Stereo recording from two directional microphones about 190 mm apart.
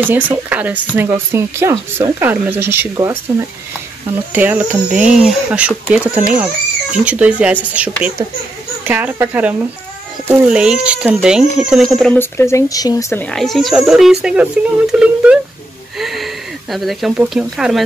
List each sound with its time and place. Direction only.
0.0 s speech: 10° right (ahead or behind)
4.3 s speech: 10° right (ahead or behind); by 13.2 s 20° left (ahead or behind)
13.2 s speech: 5° left (ahead or behind)
16.0 s a sound: centre (ahead or behind)
16.7 s speech: centre (ahead or behind)